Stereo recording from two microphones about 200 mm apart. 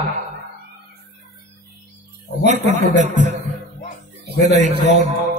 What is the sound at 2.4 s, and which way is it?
Speech, 35° right (ahead or behind).